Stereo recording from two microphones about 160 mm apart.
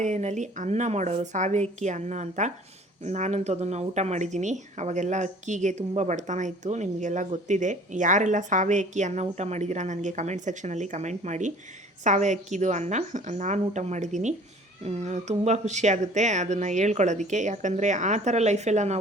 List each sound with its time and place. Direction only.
0.0 s speech: 45° right (ahead or behind)